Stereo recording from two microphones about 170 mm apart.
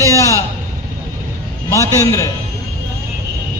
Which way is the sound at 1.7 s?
15° left (ahead or behind).